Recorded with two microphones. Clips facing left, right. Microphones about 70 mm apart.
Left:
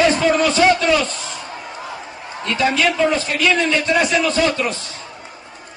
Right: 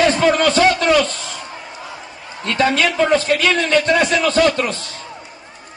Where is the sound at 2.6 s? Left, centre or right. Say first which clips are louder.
Right 1 dB; right.